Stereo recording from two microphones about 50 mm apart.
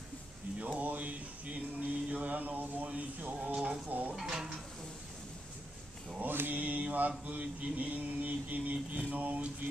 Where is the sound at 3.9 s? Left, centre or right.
Right.